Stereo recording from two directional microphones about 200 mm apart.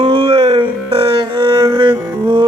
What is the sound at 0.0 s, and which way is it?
Music, 25° right (ahead or behind).